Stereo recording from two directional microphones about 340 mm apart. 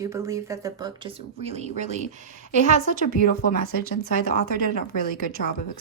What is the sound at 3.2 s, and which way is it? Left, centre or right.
Speech, left.